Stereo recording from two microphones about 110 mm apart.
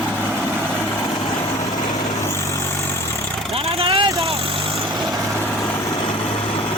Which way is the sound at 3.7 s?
60° right (ahead or behind).